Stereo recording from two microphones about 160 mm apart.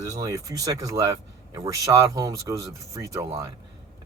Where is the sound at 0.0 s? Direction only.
20° right (ahead or behind).